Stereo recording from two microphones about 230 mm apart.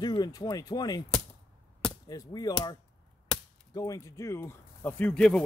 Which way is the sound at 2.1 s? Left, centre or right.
Centre.